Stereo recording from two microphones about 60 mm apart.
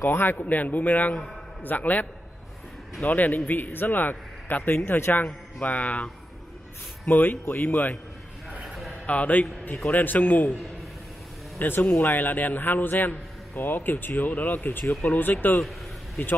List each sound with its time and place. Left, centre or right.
0.0 s a man's voice: left
3.1 s a man's voice: left
7.1 s a man's voice: left
8.6 s a sound: centre
9.0 s a man's voice: left
11.5 s a man's voice: left